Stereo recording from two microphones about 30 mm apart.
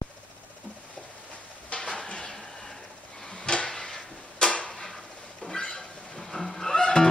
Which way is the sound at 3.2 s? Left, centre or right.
Left.